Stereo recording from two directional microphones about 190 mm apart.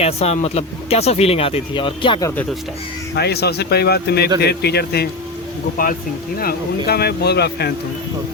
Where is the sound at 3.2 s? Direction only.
60° left (ahead or behind).